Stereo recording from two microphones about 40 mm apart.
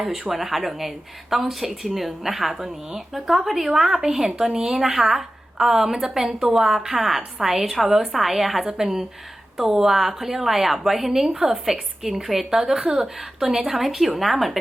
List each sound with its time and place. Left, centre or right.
0.0 s a woman's voice: centre
12.5 s a woman's voice: centre
12.8 s speech: right
13.7 s speech: centre